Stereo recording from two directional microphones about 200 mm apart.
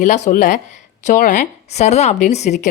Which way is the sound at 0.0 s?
35° left (ahead or behind).